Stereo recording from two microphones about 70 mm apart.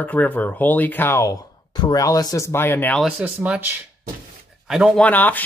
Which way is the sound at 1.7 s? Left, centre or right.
Left.